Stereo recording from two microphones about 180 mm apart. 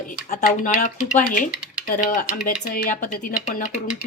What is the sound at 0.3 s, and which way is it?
Speech, 40° left (ahead or behind).